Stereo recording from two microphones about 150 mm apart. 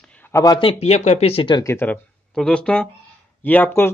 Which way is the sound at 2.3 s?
5° left (ahead or behind).